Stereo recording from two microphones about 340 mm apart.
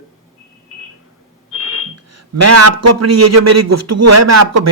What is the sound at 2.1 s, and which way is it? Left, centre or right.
A man's voice, right.